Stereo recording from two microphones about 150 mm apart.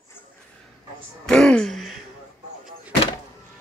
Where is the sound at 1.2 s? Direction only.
5° left (ahead or behind).